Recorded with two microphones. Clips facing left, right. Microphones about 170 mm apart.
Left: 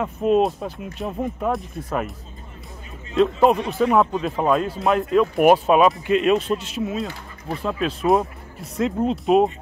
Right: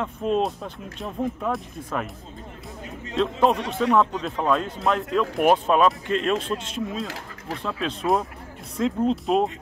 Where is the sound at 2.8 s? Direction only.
75° right (ahead or behind).